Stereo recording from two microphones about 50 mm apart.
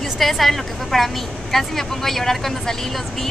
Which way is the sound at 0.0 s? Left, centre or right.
Centre.